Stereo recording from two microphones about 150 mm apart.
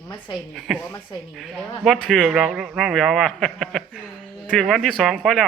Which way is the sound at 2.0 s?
Centre (ahead or behind).